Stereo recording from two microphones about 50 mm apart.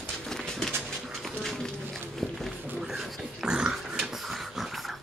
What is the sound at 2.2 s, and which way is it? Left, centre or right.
Run, centre.